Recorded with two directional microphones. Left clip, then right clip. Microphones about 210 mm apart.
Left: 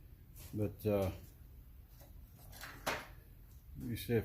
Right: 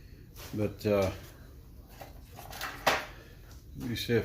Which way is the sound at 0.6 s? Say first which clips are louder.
Right 7 dB; 20° left (ahead or behind).